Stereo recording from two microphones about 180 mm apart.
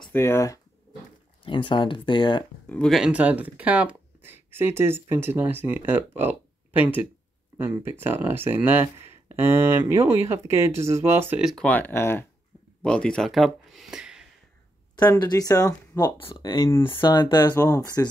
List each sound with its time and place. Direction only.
0.0 s speech: 15° left (ahead or behind)
1.4 s speech: 30° left (ahead or behind)
2.6 s speech: 5° left (ahead or behind)
15.0 s speech: 20° left (ahead or behind)
16.2 s speech: 30° left (ahead or behind)
16.6 s speech: 15° left (ahead or behind)